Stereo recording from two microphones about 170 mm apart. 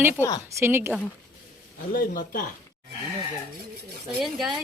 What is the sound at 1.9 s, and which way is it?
Speech, 55° left (ahead or behind).